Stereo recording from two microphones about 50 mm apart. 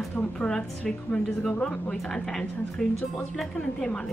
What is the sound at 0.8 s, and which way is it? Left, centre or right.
A woman's voice, centre.